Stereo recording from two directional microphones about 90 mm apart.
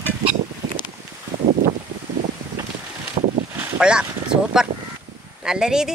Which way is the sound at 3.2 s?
90° right.